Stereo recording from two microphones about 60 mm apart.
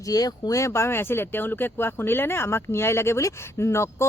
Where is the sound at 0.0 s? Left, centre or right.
Left.